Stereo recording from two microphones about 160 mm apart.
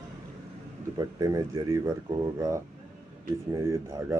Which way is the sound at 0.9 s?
25° right (ahead or behind).